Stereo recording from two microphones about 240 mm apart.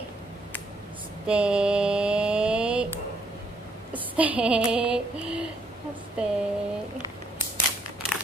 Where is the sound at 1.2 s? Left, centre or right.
Centre.